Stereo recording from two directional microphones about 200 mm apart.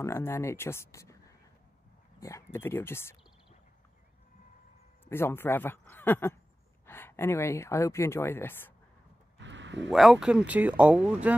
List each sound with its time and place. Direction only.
0.0 s speech: 15° left (ahead or behind)
2.1 s speech: 15° left (ahead or behind)
5.0 s a man's voice: 10° left (ahead or behind)
9.4 s a sound: 65° right (ahead or behind)
9.8 s speech: centre (ahead or behind)